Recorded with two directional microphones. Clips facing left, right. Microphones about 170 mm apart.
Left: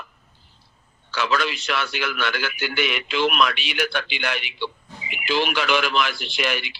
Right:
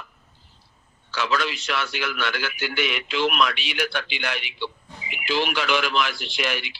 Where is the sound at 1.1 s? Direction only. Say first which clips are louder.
Left 2 dB; 65° left (ahead or behind).